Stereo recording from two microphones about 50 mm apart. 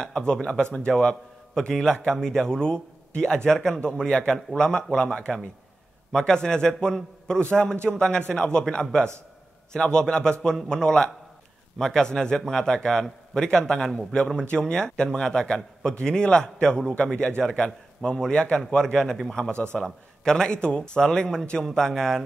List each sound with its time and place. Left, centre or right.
0.0 s a man's voice: centre
18.9 s a man's voice: centre
19.5 s a man's voice: left
19.8 s a man's voice: centre